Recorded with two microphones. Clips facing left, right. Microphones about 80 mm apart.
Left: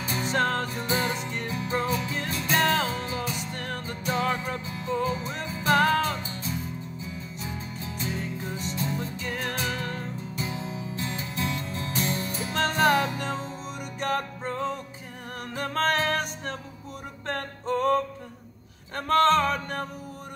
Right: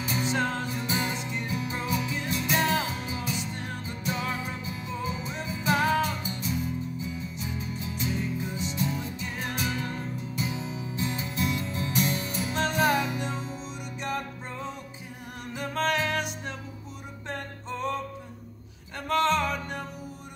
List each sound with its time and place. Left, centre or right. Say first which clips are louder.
0.0 s music: left 2 dB; left
7.3 s music: right 1 dB; left
17.3 s music: left 7 dB; left